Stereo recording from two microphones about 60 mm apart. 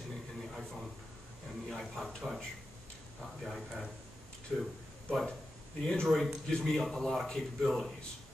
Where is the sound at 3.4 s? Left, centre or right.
Centre.